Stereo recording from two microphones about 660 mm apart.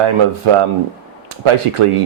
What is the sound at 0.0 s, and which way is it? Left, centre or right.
Speech, right.